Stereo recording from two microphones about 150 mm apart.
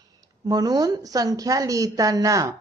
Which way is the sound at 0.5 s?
25° right (ahead or behind).